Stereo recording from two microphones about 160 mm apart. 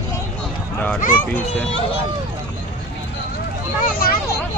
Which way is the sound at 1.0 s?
55° left (ahead or behind).